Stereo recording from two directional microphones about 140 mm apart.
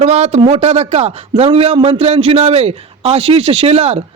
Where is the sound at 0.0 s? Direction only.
50° right (ahead or behind).